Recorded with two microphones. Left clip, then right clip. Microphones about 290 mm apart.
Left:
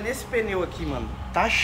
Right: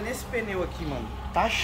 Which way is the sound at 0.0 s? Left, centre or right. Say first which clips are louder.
Left 5 dB; centre.